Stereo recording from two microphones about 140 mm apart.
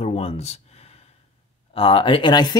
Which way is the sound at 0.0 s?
50° left (ahead or behind).